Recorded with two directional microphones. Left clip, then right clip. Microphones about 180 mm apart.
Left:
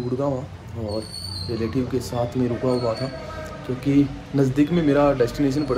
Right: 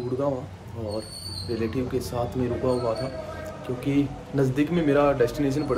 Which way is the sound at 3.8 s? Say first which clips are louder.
Left 6 dB; 15° right (ahead or behind).